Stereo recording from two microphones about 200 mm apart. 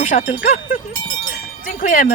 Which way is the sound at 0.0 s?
35° left (ahead or behind).